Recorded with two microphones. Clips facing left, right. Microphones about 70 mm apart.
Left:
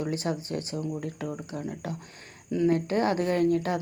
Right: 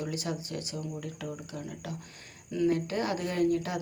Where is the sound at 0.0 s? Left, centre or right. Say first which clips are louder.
Left 5 dB; left.